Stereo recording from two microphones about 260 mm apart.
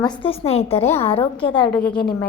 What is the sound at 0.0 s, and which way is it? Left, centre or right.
A woman's voice, centre.